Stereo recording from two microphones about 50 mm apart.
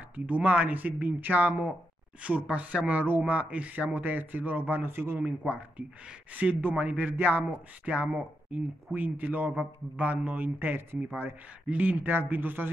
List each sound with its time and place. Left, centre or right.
0.1 s a man's voice: right
6.3 s a man's voice: right
7.1 s a man's voice: right